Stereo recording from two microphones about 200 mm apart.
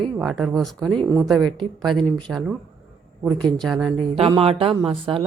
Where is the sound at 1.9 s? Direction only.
5° left (ahead or behind).